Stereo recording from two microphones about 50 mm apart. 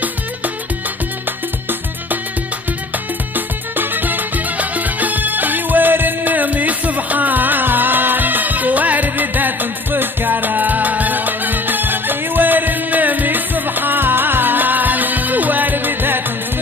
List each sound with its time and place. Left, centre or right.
3.3 s music: right